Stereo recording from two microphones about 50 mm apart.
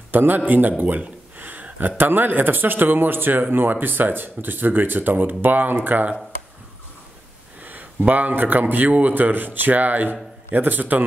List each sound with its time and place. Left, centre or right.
0.1 s a man's voice: right
7.6 s speech: right